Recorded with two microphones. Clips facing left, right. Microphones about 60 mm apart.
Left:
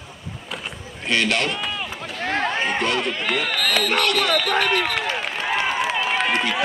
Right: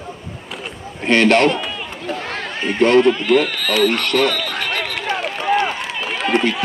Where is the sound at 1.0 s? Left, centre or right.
Right.